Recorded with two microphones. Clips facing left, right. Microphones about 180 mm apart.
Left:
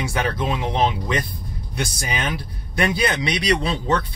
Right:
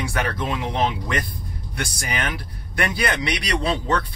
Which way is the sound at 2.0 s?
25° left (ahead or behind).